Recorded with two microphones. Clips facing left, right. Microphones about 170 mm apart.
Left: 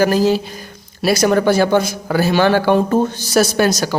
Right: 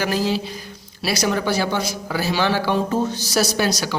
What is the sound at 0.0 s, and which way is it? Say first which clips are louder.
A man's voice: left 7 dB; 45° left (ahead or behind).